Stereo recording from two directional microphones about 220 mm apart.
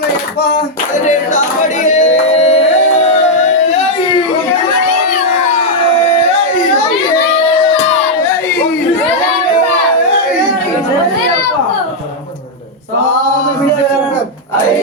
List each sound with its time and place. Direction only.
1.0 s music: 35° left (ahead or behind)